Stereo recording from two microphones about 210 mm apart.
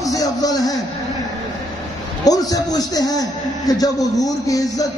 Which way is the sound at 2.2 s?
15° left (ahead or behind).